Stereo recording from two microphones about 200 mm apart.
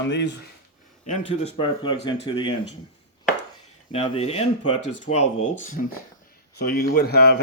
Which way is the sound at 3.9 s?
30° left (ahead or behind).